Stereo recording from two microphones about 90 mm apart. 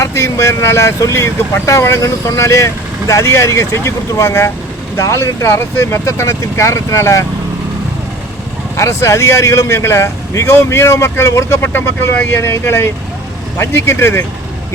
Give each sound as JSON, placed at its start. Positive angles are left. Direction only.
{"t": 0.0, "sound": "speech", "side_deg": 30}
{"t": 8.7, "sound": "speech", "side_deg": 35}